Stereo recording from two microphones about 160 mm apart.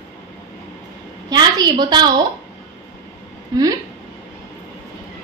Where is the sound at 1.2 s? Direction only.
25° right (ahead or behind).